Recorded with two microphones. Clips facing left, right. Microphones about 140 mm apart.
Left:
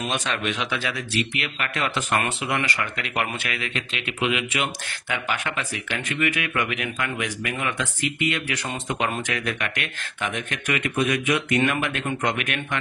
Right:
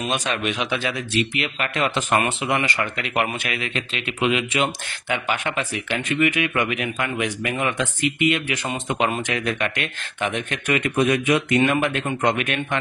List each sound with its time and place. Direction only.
0.1 s speech: 15° right (ahead or behind); by 12.5 s 30° right (ahead or behind)